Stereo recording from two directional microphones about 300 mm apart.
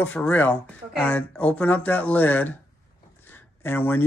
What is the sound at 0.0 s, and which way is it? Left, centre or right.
Speech, centre.